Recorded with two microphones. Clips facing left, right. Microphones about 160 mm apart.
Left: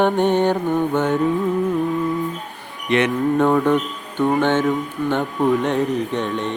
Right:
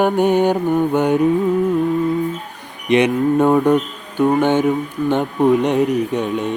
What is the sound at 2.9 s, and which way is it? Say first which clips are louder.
Mantra: right 3 dB; 15° right (ahead or behind).